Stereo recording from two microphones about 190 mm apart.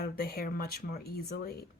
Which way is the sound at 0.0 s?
55° left (ahead or behind).